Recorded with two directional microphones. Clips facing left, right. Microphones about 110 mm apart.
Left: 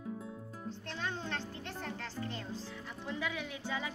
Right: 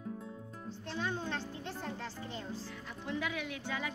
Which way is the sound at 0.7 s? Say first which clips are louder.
Right 2 dB; 10° right (ahead or behind).